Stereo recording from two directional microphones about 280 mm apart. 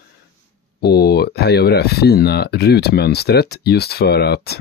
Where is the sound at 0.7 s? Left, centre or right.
Left.